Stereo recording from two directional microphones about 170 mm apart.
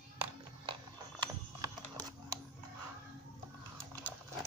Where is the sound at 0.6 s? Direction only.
30° right (ahead or behind).